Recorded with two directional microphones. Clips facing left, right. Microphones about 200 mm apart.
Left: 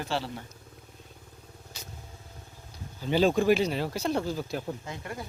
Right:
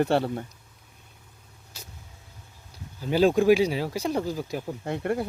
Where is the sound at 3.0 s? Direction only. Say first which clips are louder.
Right 3 dB; 5° right (ahead or behind).